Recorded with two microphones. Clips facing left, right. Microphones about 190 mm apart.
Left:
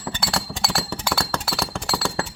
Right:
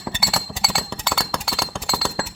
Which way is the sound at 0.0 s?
5° right (ahead or behind).